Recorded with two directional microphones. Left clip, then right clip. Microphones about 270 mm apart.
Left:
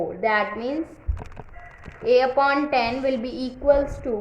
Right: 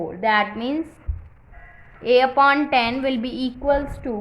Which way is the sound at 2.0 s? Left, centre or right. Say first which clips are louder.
Right 3 dB; right.